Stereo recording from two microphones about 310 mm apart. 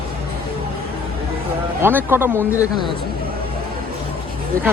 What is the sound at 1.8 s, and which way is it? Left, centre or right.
Speech, centre.